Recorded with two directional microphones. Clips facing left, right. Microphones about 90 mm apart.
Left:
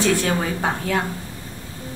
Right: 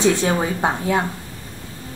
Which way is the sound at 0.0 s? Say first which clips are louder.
Right 2 dB; 20° right (ahead or behind).